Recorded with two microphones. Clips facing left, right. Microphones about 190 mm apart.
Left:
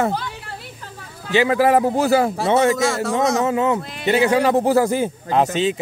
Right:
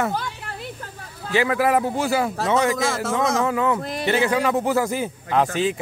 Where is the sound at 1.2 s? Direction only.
25° left (ahead or behind).